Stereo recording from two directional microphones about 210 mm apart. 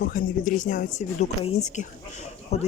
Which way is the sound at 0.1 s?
35° left (ahead or behind).